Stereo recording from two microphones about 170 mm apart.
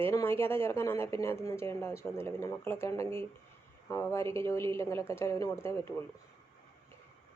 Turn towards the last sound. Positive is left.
turn(degrees=15)  # may be behind; listen again after turning